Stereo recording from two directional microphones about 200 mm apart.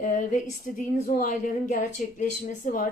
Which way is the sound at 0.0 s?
40° left (ahead or behind).